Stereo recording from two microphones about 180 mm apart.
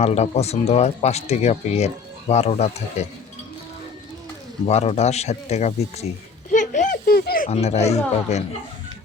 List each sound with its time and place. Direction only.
0.0 s speech: 35° left (ahead or behind)
4.6 s speech: 35° left (ahead or behind)
6.5 s a sound: 45° left (ahead or behind)
7.5 s speech: 35° left (ahead or behind)